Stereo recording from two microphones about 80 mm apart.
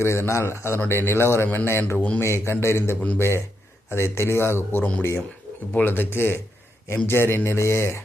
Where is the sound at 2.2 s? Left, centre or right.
Left.